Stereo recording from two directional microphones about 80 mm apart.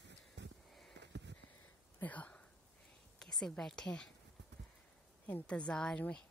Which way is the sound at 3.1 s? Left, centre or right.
Centre.